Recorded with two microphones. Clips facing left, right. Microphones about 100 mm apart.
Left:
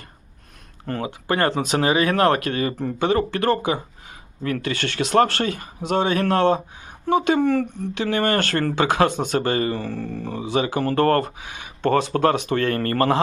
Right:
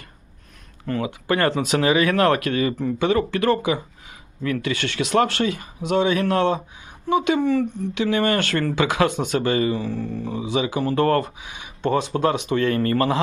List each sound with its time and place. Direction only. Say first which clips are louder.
0.9 s speech: right 1 dB; 40° left (ahead or behind); by 7.7 s 55° left (ahead or behind)
7.9 s speech: even; 40° left (ahead or behind)